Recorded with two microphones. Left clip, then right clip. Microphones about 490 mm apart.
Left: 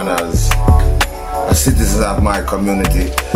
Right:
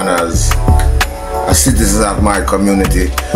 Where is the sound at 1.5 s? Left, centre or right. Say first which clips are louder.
Right 3 dB; left.